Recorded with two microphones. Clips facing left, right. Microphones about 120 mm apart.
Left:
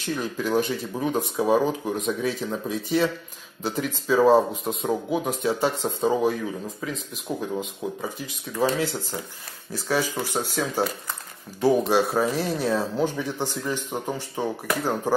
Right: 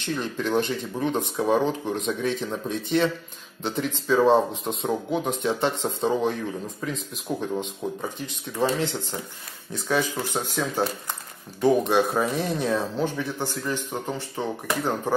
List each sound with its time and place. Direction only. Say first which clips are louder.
0.0 s speech: even; 10° left (ahead or behind)